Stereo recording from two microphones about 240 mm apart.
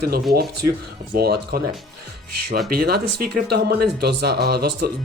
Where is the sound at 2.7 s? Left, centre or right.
Right.